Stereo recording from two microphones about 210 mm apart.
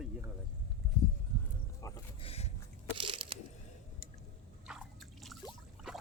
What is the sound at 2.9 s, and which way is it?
Crunch, 25° right (ahead or behind).